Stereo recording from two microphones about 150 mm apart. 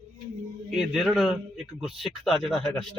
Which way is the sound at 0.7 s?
Centre (ahead or behind).